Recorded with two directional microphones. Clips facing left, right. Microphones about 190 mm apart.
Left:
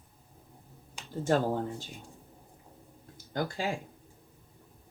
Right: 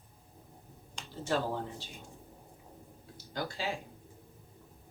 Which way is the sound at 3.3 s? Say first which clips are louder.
Left 4 dB; 50° left (ahead or behind).